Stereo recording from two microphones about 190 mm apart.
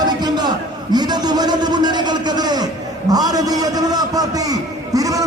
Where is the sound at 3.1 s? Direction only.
20° right (ahead or behind).